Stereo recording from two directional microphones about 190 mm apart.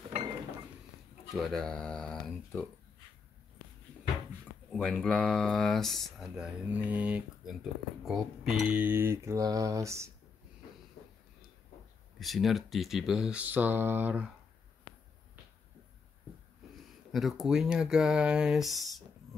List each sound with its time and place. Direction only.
1.3 s speech: centre (ahead or behind)
4.6 s speech: 5° left (ahead or behind); by 10.1 s 15° right (ahead or behind)
12.2 s speech: centre (ahead or behind)
17.1 s speech: centre (ahead or behind)